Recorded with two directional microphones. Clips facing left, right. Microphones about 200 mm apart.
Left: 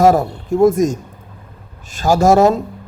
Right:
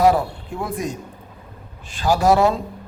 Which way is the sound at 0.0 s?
45° left (ahead or behind).